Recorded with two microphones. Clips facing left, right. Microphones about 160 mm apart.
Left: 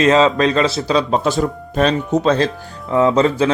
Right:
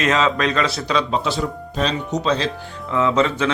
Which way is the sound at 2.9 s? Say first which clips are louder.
Left 5 dB; 35° left (ahead or behind).